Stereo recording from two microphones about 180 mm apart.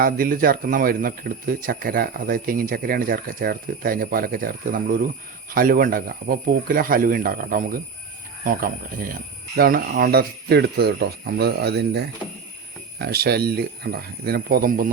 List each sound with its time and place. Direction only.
0.0 s speech: 50° right (ahead or behind)